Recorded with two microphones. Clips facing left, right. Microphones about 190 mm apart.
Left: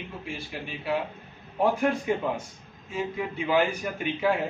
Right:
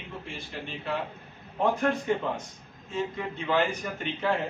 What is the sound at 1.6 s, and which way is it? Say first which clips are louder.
A man's voice: left 2 dB; 10° left (ahead or behind).